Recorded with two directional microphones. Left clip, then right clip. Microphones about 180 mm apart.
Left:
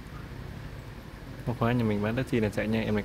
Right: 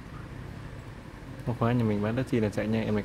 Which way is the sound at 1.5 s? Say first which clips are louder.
Even; 5° right (ahead or behind).